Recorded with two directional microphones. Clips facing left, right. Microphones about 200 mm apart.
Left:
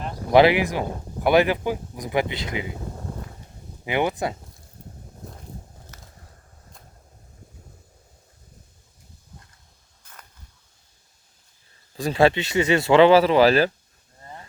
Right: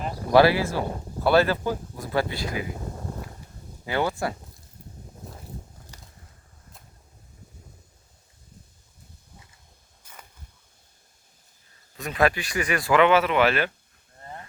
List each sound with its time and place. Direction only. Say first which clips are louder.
0.3 s speech: left 2 dB; 20° left (ahead or behind)
3.8 s speech: left 2 dB; 20° left (ahead or behind)
10.0 s a sound: right 1 dB; 10° right (ahead or behind)
11.9 s speech: left 5 dB; 30° left (ahead or behind)